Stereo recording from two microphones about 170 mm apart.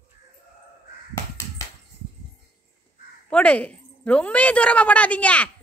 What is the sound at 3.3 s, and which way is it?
A woman's voice, 10° left (ahead or behind).